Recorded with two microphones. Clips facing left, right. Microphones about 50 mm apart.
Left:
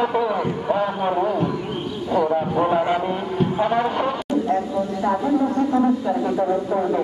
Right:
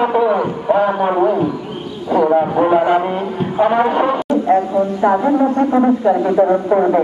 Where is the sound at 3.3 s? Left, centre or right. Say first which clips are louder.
Right 1 dB; centre.